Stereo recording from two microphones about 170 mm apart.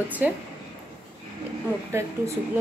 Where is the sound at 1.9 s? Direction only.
15° right (ahead or behind).